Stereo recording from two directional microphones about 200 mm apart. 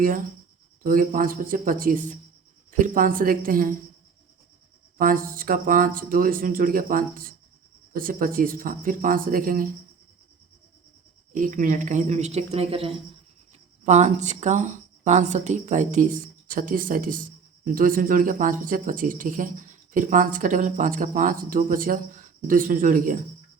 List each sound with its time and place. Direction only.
0.0 s speech: 45° right (ahead or behind)
4.9 s speech: 45° right (ahead or behind)
11.3 s a woman's voice: 40° right (ahead or behind)